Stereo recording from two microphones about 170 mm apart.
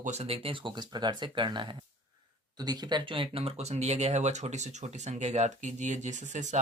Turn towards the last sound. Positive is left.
turn(degrees=-45)  # may be behind; listen again after turning